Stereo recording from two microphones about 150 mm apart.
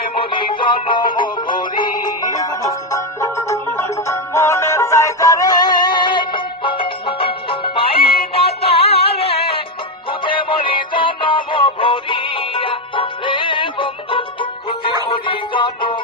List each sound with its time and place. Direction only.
0.1 s music: 35° left (ahead or behind)